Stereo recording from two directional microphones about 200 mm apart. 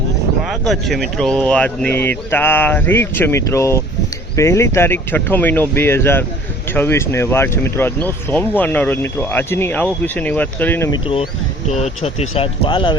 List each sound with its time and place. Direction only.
0.7 s speech: centre (ahead or behind)
10.9 s speech: 25° left (ahead or behind)